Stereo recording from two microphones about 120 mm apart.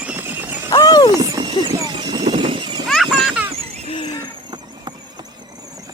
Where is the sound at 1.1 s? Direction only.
25° right (ahead or behind).